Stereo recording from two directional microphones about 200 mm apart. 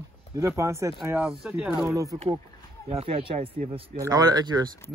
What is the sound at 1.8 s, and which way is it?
Speech, 15° right (ahead or behind).